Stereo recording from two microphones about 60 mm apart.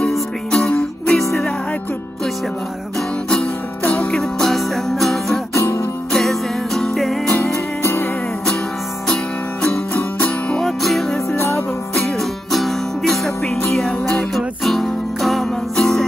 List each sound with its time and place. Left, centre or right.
0.5 s music: centre
3.8 s music: left
4.1 s music: centre
5.5 s music: left
6.1 s music: centre
7.8 s music: left
9.0 s music: centre
9.7 s music: left
10.2 s music: centre
10.8 s music: centre
11.3 s music: left
12.2 s music: centre